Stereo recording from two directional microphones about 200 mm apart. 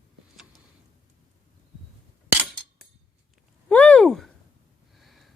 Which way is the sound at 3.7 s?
5° left (ahead or behind).